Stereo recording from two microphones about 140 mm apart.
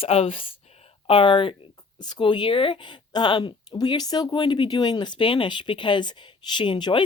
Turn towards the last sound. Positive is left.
turn(degrees=35)  # may be behind; listen again after turning